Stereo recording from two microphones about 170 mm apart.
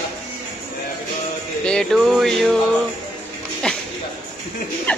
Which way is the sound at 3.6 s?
5° left (ahead or behind).